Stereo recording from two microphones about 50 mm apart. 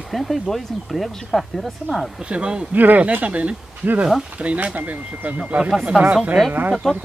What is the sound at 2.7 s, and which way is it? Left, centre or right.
Speech, right.